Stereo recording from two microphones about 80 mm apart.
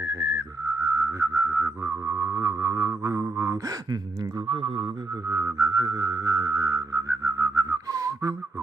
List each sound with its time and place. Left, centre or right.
0.0 s whistling: right
0.8 s music: right
5.3 s a sound: right